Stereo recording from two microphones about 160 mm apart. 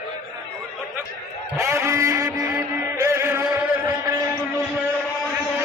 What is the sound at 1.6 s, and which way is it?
Music, 20° right (ahead or behind).